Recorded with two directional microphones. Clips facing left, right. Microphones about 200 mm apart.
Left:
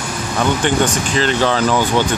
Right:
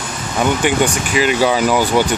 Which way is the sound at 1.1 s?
10° right (ahead or behind).